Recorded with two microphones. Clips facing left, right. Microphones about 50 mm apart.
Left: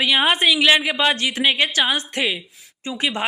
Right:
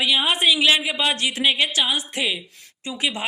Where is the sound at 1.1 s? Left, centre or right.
Left.